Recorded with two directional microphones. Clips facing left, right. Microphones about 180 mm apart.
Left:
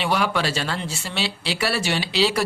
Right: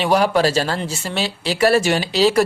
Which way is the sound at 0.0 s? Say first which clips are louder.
Right 7 dB; 40° right (ahead or behind).